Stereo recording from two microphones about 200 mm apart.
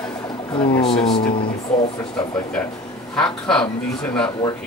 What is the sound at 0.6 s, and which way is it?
Speech, 25° left (ahead or behind).